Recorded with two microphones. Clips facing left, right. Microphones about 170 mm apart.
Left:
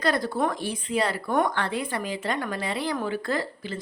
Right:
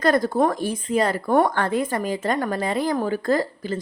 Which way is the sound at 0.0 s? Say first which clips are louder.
Right 6 dB; 45° right (ahead or behind).